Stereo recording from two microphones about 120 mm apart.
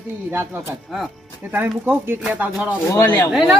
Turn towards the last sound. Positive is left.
turn(degrees=0)  # may be behind; listen again after turning